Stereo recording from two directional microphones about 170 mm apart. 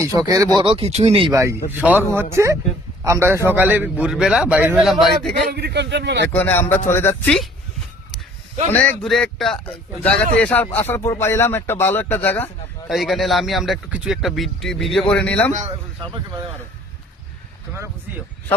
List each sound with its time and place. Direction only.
0.1 s speech: 20° right (ahead or behind)
0.6 s speech: 35° right (ahead or behind)
1.3 s a man's voice: 15° right (ahead or behind); by 5.3 s centre (ahead or behind)
5.5 s a man's voice: 75° right (ahead or behind)
6.3 s a man's voice: 10° left (ahead or behind)
8.7 s a man's voice: 10° left (ahead or behind)
12.9 s speech: centre (ahead or behind)